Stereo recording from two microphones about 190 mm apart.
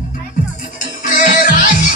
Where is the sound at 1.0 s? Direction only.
45° left (ahead or behind).